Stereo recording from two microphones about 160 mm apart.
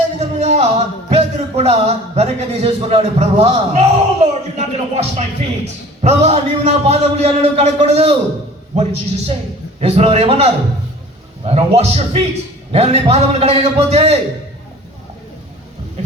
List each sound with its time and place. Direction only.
0.2 s a man's voice: 45° right (ahead or behind)